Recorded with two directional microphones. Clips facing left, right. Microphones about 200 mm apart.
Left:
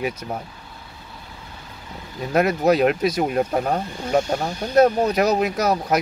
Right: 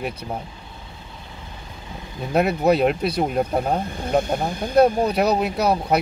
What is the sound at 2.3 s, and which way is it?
Speech, centre (ahead or behind).